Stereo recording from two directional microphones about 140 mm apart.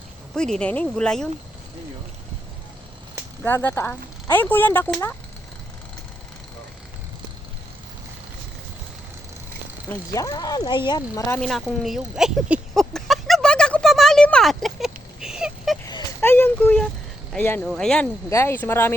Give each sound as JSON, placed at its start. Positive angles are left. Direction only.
{"t": 0.3, "sound": "speech", "side_deg": 5}
{"t": 3.4, "sound": "speech", "side_deg": 15}
{"t": 10.1, "sound": "speech", "side_deg": 25}
{"t": 11.3, "sound": "a sound", "side_deg": 5}
{"t": 16.2, "sound": "a sound", "side_deg": 15}
{"t": 17.3, "sound": "speech", "side_deg": 15}
{"t": 17.7, "sound": "speech", "side_deg": 5}
{"t": 18.3, "sound": "speech", "side_deg": 20}